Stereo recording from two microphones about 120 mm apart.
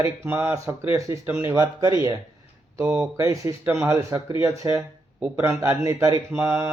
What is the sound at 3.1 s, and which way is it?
Speech, 25° right (ahead or behind).